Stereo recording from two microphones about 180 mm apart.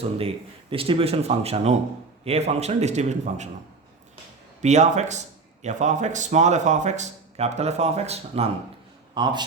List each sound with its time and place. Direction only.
0.0 s speech: 35° right (ahead or behind)
4.6 s speech: 40° right (ahead or behind)
9.1 s a man's voice: 25° right (ahead or behind)